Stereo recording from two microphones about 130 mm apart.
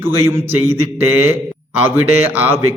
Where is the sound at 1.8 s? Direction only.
15° right (ahead or behind).